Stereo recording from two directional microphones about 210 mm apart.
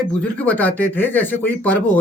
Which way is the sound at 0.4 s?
10° left (ahead or behind).